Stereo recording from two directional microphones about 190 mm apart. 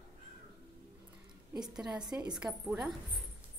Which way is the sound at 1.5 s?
5° right (ahead or behind).